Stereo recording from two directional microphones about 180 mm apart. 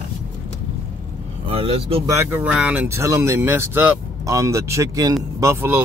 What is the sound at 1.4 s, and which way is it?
Speech, 30° right (ahead or behind).